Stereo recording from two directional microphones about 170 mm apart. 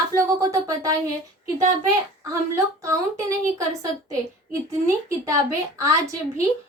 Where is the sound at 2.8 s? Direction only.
20° right (ahead or behind).